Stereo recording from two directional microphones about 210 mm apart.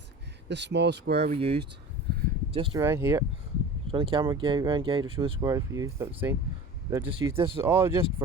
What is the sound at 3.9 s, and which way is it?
Speech, 25° right (ahead or behind).